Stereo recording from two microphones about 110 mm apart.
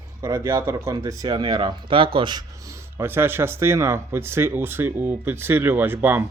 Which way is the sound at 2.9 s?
20° right (ahead or behind).